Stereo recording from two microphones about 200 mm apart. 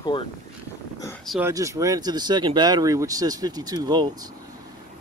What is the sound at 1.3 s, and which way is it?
Speech, 10° right (ahead or behind).